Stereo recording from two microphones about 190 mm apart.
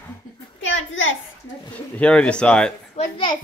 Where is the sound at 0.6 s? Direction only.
80° left.